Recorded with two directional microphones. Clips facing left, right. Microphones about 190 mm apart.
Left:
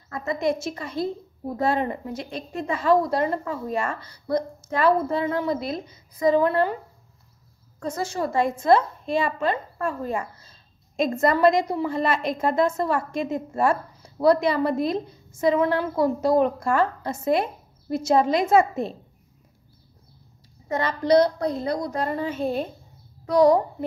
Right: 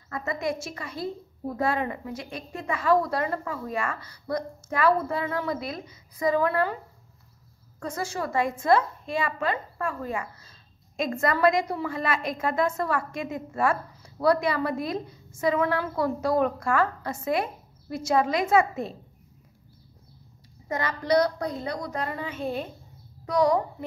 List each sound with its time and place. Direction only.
0.4 s a woman's voice: 20° left (ahead or behind)
7.8 s a woman's voice: 25° left (ahead or behind)
20.8 s a woman's voice: 25° left (ahead or behind)